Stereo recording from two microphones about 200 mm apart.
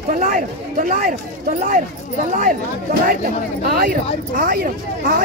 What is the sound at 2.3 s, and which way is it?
Speech, 45° right (ahead or behind).